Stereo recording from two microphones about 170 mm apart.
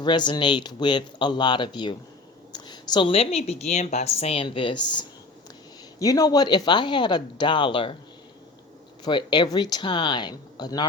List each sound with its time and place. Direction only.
0.0 s a woman's voice: 25° left (ahead or behind)
9.0 s speech: 25° left (ahead or behind)